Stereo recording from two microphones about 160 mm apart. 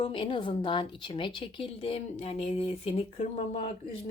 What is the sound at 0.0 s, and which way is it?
A woman's voice, 30° left (ahead or behind).